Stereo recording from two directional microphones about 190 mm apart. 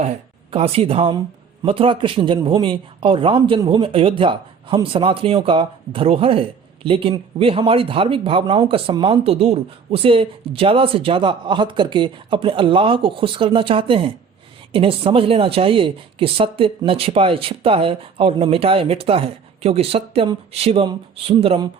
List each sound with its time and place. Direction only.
0.5 s a woman's voice: 30° right (ahead or behind)